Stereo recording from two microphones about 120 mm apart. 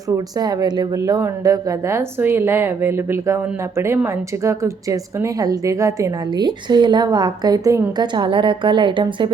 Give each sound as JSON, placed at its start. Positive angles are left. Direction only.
{"t": 0.3, "sound": "a woman's voice", "side_deg": -35}
{"t": 8.0, "sound": "a woman's voice", "side_deg": -40}